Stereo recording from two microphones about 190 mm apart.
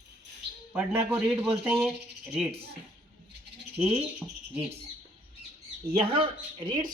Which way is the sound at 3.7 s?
5° right (ahead or behind).